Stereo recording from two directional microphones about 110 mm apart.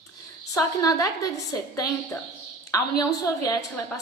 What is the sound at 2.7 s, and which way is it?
A woman's voice, 35° left (ahead or behind).